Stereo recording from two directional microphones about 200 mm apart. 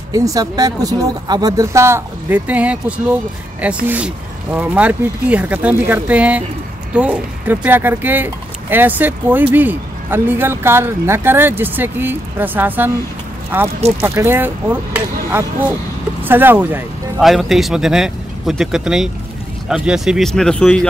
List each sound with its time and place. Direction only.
0.1 s speech: 15° right (ahead or behind)
3.8 s speech: 10° right (ahead or behind)